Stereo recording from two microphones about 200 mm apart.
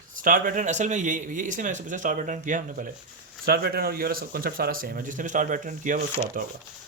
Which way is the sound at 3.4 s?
50° right (ahead or behind).